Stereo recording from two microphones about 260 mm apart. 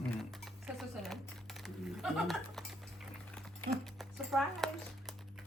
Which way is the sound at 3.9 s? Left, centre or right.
Centre.